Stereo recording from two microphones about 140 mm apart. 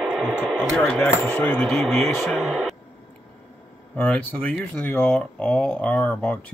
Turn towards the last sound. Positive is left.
turn(degrees=10)  # may be behind; listen again after turning